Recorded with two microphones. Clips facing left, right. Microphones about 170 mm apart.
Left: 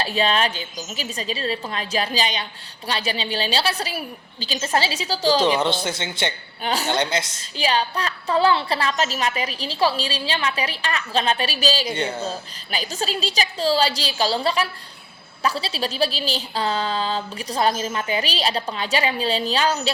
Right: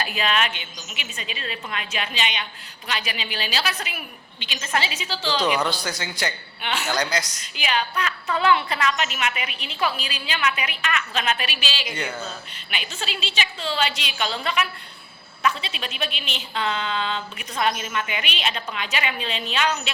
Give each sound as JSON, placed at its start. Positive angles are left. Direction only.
{"t": 0.0, "sound": "a woman's voice", "side_deg": 30}
{"t": 5.4, "sound": "speech", "side_deg": 25}
{"t": 6.6, "sound": "a woman's voice", "side_deg": 35}